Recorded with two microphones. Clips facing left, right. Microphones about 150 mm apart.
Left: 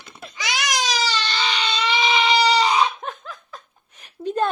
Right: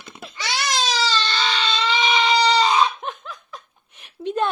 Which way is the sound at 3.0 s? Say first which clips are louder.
Right 1 dB; 45° left (ahead or behind).